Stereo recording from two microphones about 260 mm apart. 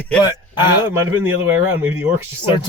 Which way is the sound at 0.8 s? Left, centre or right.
Centre.